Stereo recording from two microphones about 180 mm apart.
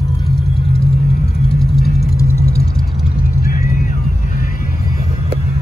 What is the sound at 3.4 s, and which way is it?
Vehicle, 50° left (ahead or behind).